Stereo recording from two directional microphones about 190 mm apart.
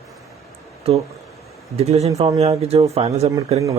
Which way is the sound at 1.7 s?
35° right (ahead or behind).